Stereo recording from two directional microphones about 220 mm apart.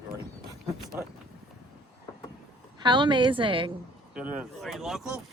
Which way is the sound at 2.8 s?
20° right (ahead or behind).